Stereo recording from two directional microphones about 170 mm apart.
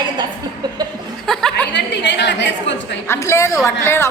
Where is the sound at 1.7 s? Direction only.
90° left.